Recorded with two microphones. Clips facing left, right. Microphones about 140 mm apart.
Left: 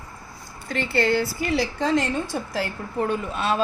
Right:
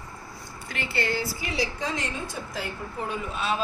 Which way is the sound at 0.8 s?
55° left (ahead or behind).